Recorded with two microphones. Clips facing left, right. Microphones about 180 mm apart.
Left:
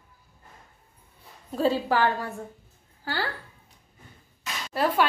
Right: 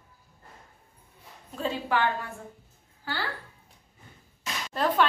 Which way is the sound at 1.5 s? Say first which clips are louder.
Left 5 dB; 35° left (ahead or behind).